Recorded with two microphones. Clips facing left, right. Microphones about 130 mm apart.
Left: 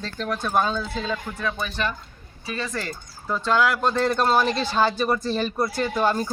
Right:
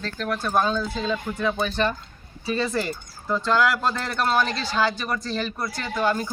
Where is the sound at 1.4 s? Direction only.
25° right (ahead or behind).